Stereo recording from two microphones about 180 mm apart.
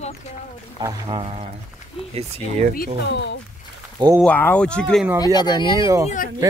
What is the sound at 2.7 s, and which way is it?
Speech, 65° left (ahead or behind).